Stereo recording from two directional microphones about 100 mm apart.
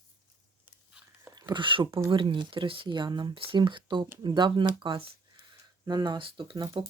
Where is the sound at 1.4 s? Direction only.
45° right (ahead or behind).